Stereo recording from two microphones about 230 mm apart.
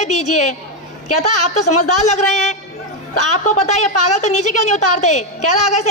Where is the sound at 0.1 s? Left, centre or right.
Left.